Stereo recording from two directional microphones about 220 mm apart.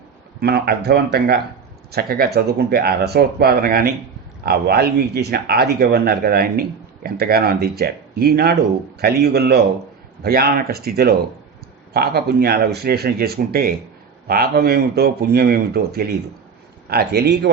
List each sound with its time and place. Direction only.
0.4 s speech: 45° right (ahead or behind)